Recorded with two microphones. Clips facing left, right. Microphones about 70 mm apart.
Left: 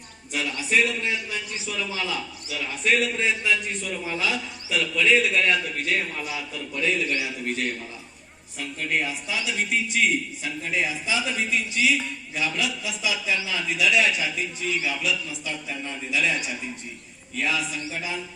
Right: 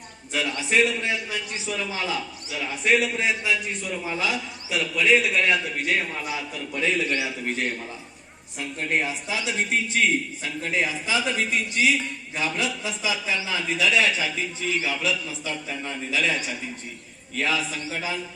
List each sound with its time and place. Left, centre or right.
0.7 s a man's voice: right
2.5 s a man's voice: centre
6.7 s a man's voice: right
10.6 s a man's voice: right
17.3 s a man's voice: right